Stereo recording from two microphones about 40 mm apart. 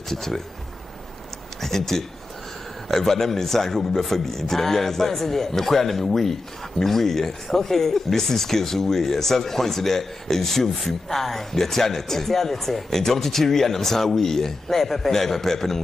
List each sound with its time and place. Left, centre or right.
0.1 s a man's voice: centre
1.6 s a man's voice: centre